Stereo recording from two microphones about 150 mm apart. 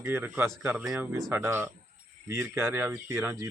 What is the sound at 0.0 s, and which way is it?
Speech, 15° right (ahead or behind).